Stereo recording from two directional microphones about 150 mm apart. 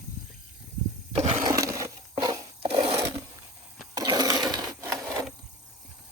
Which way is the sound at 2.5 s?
40° right (ahead or behind).